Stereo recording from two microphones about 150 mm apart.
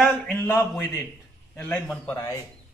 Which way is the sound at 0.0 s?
10° left (ahead or behind).